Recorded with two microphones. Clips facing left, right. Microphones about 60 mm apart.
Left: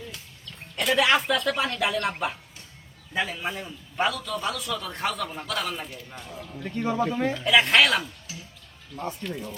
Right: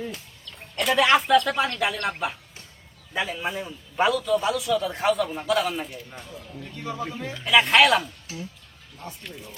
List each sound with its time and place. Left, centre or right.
0.4 s a man's voice: centre
6.6 s speech: left
7.1 s speech: left
7.3 s a man's voice: centre